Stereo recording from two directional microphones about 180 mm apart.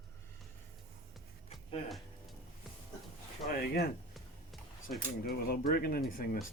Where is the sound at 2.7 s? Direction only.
Centre (ahead or behind).